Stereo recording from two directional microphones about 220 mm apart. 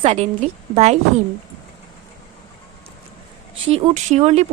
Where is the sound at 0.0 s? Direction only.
30° right (ahead or behind).